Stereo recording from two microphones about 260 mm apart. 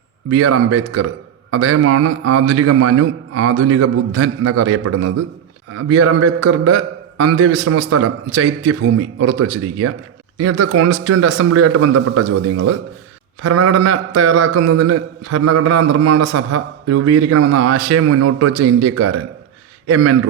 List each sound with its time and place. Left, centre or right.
0.3 s a man's voice: right